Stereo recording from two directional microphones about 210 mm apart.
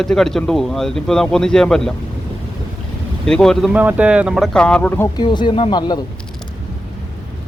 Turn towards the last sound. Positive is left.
turn(degrees=20)  # may be behind; listen again after turning